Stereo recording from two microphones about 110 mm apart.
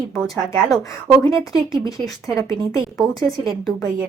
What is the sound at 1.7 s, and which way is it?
Speech, 30° left (ahead or behind).